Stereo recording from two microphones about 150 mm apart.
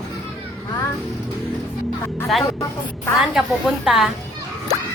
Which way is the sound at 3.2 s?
5° right (ahead or behind).